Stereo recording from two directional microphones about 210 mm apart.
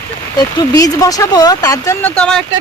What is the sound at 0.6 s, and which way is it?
Speech, 15° left (ahead or behind).